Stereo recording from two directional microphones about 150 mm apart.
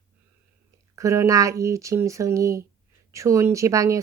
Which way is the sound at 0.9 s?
20° right (ahead or behind).